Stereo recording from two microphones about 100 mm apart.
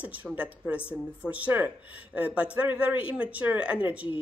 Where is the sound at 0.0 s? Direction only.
15° right (ahead or behind).